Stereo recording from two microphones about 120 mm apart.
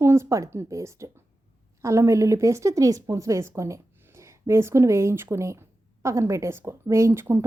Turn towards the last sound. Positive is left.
turn(degrees=-20)  # may be behind; listen again after turning